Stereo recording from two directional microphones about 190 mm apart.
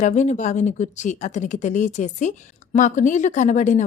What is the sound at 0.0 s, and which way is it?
Speech, 40° left (ahead or behind).